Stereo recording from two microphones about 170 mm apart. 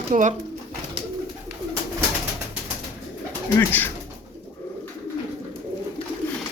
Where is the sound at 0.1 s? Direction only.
45° right (ahead or behind).